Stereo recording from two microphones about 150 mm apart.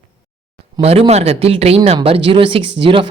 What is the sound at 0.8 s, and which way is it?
Speech, 40° right (ahead or behind).